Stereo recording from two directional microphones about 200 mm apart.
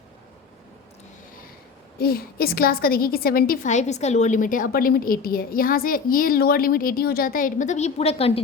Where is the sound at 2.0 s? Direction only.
50° left (ahead or behind).